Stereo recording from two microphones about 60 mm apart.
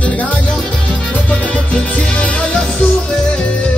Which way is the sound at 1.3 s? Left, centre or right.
Left.